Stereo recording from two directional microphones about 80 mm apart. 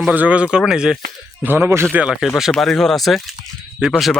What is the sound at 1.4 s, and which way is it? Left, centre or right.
Speech, right.